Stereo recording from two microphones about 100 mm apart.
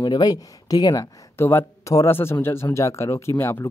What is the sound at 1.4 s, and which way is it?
Speech, 25° left (ahead or behind).